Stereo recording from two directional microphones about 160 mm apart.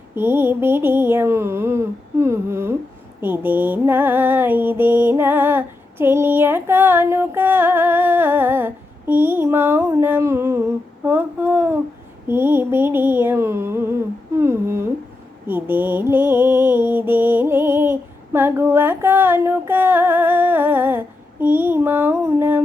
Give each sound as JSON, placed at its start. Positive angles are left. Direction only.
{"t": 0.1, "sound": "music", "side_deg": -10}
{"t": 11.0, "sound": "a sound", "side_deg": -10}
{"t": 12.3, "sound": "music", "side_deg": -15}
{"t": 14.3, "sound": "humming", "side_deg": -15}
{"t": 15.4, "sound": "mantra", "side_deg": -10}